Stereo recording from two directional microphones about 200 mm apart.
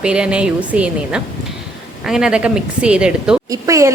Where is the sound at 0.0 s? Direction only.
5° right (ahead or behind).